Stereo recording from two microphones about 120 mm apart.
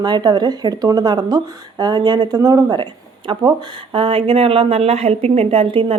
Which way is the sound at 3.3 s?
45° right (ahead or behind).